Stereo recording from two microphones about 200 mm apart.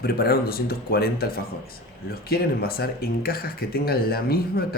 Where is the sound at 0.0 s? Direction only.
50° left (ahead or behind).